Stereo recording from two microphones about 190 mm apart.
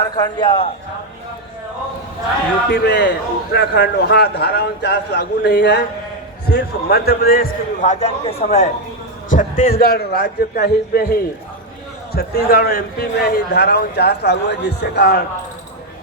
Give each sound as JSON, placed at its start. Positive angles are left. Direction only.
{"t": 0.3, "sound": "a man's voice", "side_deg": 30}
{"t": 2.6, "sound": "a man's voice", "side_deg": 60}